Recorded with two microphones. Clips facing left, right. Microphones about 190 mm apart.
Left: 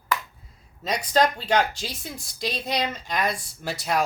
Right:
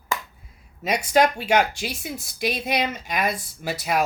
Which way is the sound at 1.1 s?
10° right (ahead or behind).